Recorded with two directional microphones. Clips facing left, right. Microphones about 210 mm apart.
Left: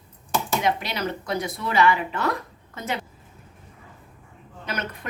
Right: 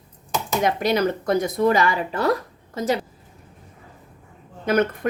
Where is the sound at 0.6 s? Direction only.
45° right (ahead or behind).